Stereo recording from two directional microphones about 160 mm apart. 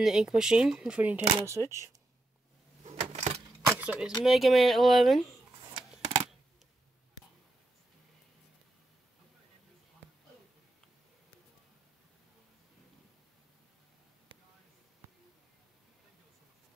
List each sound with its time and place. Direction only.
0.0 s speech: 5° right (ahead or behind)
2.8 s coin: 40° right (ahead or behind)
3.6 s a sound: 10° right (ahead or behind)
4.2 s speech: centre (ahead or behind)